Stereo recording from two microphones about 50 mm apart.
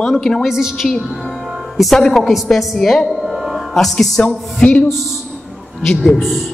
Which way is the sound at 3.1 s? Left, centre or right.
Centre.